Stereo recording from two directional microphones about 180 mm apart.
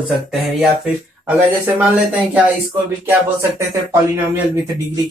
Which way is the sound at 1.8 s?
10° right (ahead or behind).